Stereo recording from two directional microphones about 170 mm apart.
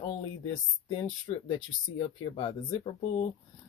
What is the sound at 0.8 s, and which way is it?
Speech, 30° left (ahead or behind).